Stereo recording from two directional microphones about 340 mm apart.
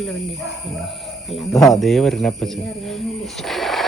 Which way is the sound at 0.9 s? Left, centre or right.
Centre.